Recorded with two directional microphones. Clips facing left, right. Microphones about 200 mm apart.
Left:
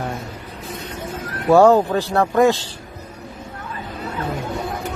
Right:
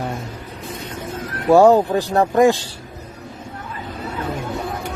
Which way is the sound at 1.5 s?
15° right (ahead or behind).